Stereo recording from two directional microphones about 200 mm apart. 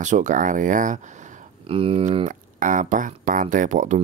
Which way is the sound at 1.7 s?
25° right (ahead or behind).